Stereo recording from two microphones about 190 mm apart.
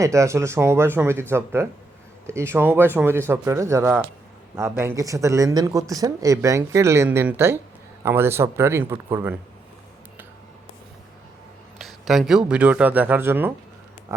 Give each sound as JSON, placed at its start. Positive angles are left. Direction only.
{"t": 0.0, "sound": "speech", "side_deg": -15}
{"t": 11.8, "sound": "speech", "side_deg": 0}